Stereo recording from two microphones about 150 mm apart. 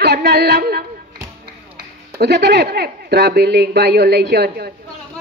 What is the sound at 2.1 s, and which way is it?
Speech, 90° right.